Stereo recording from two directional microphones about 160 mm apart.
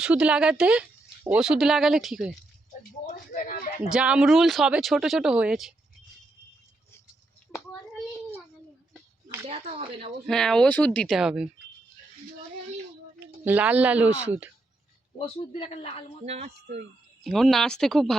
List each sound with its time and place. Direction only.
0.0 s speech: 5° right (ahead or behind)
3.1 s a sound: 55° left (ahead or behind)
3.9 s speech: 5° right (ahead or behind)
9.5 s speech: 40° right (ahead or behind)
10.2 s speech: 5° left (ahead or behind)
13.1 s speech: 10° right (ahead or behind)
15.2 s a man's voice: 35° left (ahead or behind)
16.2 s speech: 40° right (ahead or behind)
17.2 s speech: 5° left (ahead or behind)